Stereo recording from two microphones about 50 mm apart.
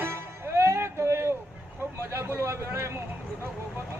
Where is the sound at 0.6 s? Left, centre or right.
Right.